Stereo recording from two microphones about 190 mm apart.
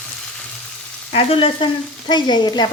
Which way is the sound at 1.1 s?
30° left (ahead or behind).